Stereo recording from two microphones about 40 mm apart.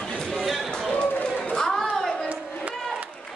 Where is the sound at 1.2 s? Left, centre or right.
Centre.